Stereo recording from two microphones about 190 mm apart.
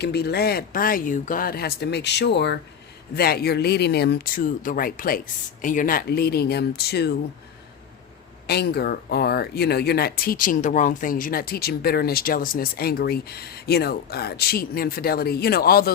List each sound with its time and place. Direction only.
0.0 s speech: 60° left (ahead or behind)
3.2 s speech: 55° left (ahead or behind)
8.4 s speech: 60° left (ahead or behind)